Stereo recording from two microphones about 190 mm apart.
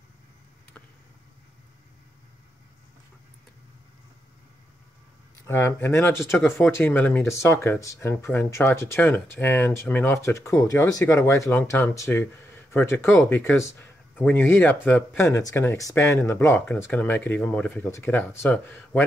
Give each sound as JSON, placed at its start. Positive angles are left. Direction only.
{"t": 5.5, "sound": "speech", "side_deg": 15}